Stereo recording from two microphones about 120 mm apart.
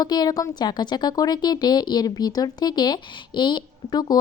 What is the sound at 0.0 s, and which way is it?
A woman's voice, 35° left (ahead or behind).